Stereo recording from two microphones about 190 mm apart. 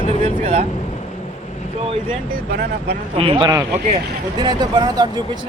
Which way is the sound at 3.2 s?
25° right (ahead or behind).